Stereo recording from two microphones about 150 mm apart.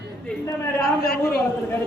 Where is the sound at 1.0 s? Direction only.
90° left.